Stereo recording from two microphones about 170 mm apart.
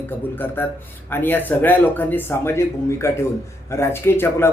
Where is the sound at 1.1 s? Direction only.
10° left (ahead or behind).